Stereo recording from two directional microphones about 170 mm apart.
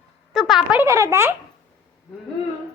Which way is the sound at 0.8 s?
20° right (ahead or behind).